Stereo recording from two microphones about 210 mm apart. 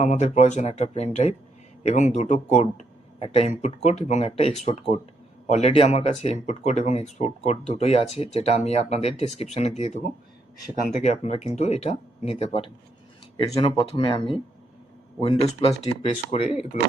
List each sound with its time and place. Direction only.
0.0 s speech: 35° left (ahead or behind)